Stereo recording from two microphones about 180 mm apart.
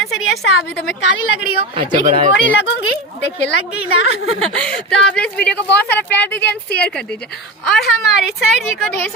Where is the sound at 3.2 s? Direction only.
70° left (ahead or behind).